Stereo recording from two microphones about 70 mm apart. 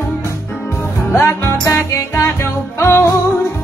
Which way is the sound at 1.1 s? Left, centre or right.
Left.